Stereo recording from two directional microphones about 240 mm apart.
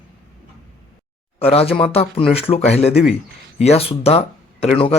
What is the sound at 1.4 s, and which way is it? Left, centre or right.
Speech, left.